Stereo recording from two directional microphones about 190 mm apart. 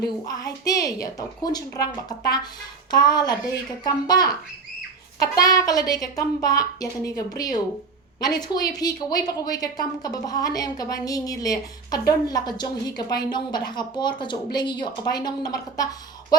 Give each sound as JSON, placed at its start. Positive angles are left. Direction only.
{"t": 0.0, "sound": "speech", "side_deg": 20}